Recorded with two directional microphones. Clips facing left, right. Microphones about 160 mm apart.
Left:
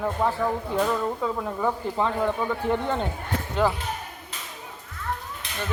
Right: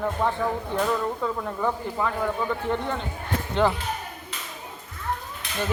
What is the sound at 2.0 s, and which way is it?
Speech, 25° left (ahead or behind).